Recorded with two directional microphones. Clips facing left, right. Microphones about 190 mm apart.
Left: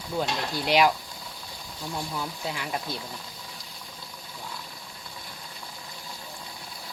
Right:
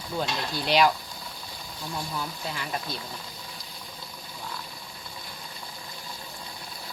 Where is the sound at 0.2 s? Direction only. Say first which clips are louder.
Left 1 dB; 10° left (ahead or behind).